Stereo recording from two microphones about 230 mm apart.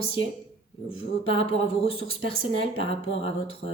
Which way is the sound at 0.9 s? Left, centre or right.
Left.